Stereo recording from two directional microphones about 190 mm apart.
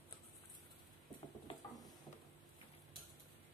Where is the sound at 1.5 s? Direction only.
30° left (ahead or behind).